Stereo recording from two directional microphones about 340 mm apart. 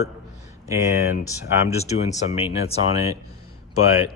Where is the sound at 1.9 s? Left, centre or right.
Centre.